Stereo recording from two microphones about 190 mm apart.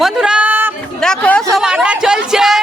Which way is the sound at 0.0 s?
5° right (ahead or behind).